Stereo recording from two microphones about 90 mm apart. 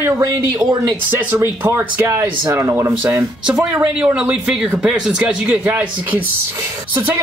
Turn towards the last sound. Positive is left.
turn(degrees=-20)  # may be behind; listen again after turning